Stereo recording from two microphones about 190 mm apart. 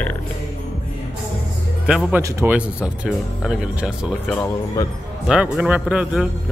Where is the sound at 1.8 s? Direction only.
5° right (ahead or behind).